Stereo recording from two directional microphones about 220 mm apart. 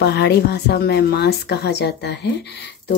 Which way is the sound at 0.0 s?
50° left (ahead or behind).